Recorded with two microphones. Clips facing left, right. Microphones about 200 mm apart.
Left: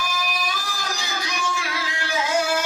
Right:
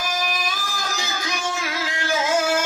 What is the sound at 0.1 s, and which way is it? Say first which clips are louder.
Music: right 2 dB; 45° right (ahead or behind).